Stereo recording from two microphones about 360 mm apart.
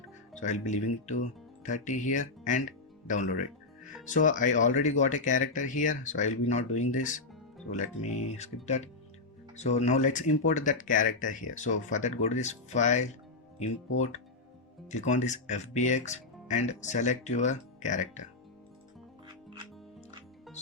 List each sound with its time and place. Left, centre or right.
0.3 s speech: centre
8.4 s speech: centre